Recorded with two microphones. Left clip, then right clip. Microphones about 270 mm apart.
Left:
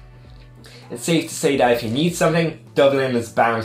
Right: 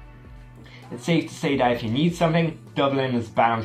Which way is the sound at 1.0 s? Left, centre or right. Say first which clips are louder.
Left 5 dB; right.